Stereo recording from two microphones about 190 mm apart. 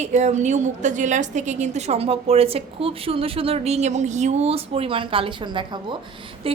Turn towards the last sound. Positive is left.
turn(degrees=-30)  # may be behind; listen again after turning